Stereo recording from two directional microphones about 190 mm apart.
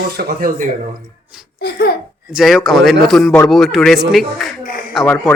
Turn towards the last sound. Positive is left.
turn(degrees=0)  # may be behind; listen again after turning